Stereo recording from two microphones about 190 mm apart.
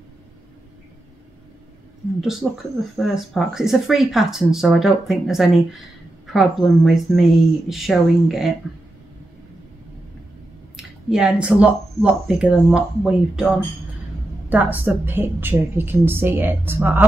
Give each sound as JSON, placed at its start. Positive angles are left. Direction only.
{"t": 2.1, "sound": "speech", "side_deg": 0}
{"t": 10.8, "sound": "a woman's voice", "side_deg": -5}